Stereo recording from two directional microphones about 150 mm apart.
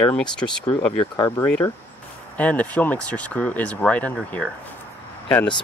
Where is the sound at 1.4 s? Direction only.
10° left (ahead or behind).